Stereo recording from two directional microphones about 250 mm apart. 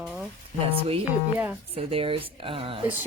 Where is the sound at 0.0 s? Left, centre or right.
Centre.